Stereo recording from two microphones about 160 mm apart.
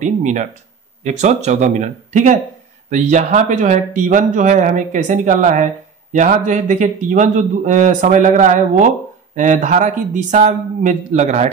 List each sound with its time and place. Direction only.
0.0 s a man's voice: 50° right (ahead or behind)